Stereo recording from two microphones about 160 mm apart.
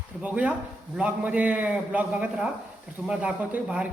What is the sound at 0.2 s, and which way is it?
A man's voice, 10° right (ahead or behind).